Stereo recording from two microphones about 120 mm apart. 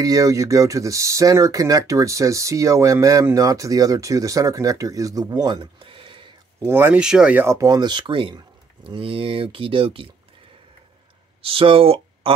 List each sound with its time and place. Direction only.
0.0 s speech: 30° right (ahead or behind); by 6.2 s 45° right (ahead or behind)
6.6 s speech: 20° right (ahead or behind)
7.0 s speech: 5° right (ahead or behind)
7.4 s speech: 30° right (ahead or behind); by 10.0 s 50° right (ahead or behind)
11.4 s speech: 50° right (ahead or behind)